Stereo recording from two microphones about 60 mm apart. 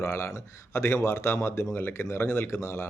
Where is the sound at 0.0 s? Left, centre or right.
Left.